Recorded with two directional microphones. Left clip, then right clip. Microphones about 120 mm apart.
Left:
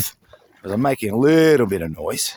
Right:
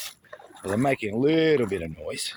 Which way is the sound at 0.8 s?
80° left.